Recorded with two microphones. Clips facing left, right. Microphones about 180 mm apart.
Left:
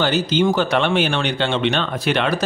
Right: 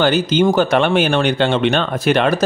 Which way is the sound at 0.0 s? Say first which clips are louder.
Right 4 dB; 50° right (ahead or behind).